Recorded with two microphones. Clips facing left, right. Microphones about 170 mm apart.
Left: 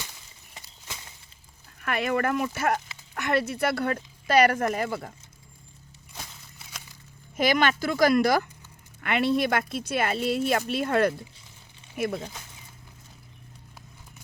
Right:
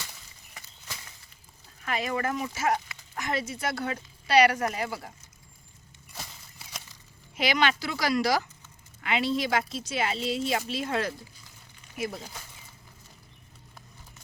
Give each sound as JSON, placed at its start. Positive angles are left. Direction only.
{"t": 1.8, "sound": "speech", "side_deg": 60}
{"t": 6.6, "sound": "a sound", "side_deg": 0}
{"t": 7.3, "sound": "speech", "side_deg": 50}